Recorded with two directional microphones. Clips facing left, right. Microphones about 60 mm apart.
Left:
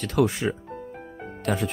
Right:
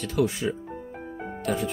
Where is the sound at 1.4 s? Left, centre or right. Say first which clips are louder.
Left 1 dB; left.